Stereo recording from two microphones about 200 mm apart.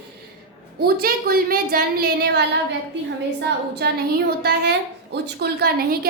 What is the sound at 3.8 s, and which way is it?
A woman's voice, 55° right (ahead or behind).